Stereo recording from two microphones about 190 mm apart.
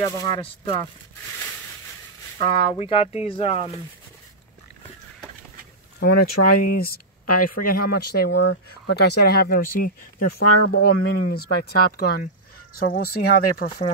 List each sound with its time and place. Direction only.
0.0 s speech: 20° left (ahead or behind)
2.3 s speech: 30° left (ahead or behind)
5.9 s speech: 50° left (ahead or behind)
10.7 s speech: 60° left (ahead or behind)